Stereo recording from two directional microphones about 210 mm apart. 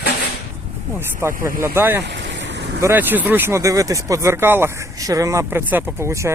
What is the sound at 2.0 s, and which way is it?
Vehicle, 55° right (ahead or behind).